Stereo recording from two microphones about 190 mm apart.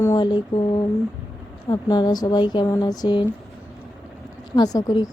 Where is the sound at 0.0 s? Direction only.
20° left (ahead or behind).